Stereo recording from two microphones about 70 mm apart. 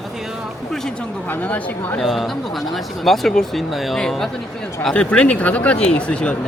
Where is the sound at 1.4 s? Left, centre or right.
Left.